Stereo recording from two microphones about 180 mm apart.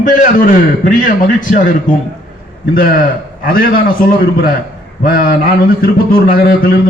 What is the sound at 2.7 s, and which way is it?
A man's voice, 55° left (ahead or behind).